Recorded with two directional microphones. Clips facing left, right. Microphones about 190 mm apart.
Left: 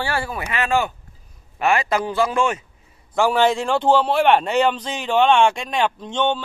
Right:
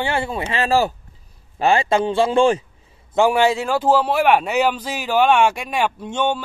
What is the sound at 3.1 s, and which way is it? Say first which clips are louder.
A man's voice: right 2 dB; 15° right (ahead or behind).